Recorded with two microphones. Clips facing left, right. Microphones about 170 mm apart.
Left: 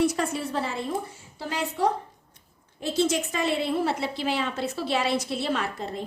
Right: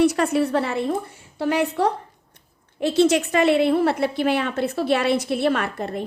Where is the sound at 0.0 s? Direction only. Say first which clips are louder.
Right 7 dB; 65° right (ahead or behind).